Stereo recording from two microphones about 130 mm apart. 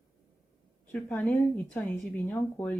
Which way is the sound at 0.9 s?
10° left (ahead or behind).